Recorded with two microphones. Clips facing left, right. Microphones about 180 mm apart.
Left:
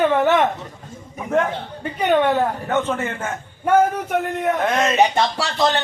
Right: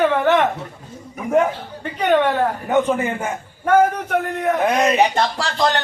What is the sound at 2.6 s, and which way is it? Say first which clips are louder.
Speech: right 4 dB; 15° right (ahead or behind).